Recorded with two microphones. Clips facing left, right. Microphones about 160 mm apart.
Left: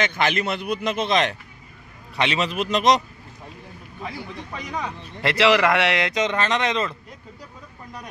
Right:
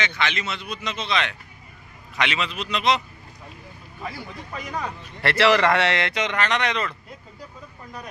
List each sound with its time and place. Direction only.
0.0 s a man's voice: 50° left (ahead or behind)
2.1 s a man's voice: 30° left (ahead or behind)
2.4 s a man's voice: 45° left (ahead or behind)
4.0 s speech: 5° right (ahead or behind)
5.2 s speech: 10° left (ahead or behind)